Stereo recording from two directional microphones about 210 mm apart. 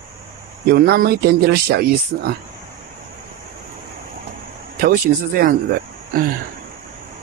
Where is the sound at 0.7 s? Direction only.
50° right (ahead or behind).